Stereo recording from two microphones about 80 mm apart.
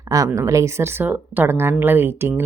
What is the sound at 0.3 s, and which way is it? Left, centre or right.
Speech, right.